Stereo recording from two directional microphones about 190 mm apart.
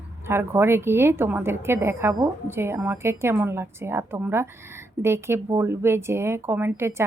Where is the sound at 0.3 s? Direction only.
10° right (ahead or behind).